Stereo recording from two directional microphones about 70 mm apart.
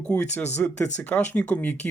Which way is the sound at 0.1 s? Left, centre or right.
Left.